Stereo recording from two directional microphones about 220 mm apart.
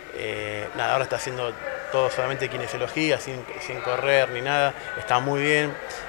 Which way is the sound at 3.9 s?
20° left (ahead or behind).